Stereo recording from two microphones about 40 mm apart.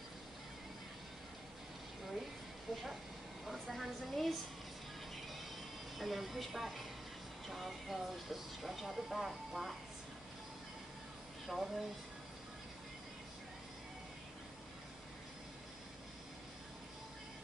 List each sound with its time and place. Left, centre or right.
2.7 s speech: centre
5.9 s speech: centre
11.4 s speech: centre